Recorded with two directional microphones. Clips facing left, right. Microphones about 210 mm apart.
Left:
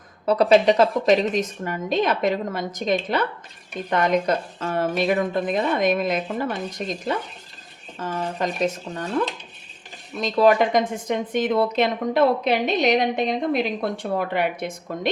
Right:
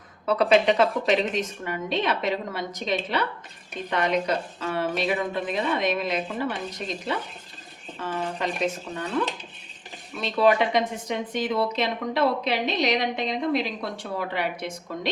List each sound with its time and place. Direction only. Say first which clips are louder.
0.3 s a woman's voice: left 4 dB; 40° left (ahead or behind)
8.0 s a woman's voice: left 3 dB; 45° left (ahead or behind)
10.2 s a woman's voice: left 3 dB; 45° left (ahead or behind)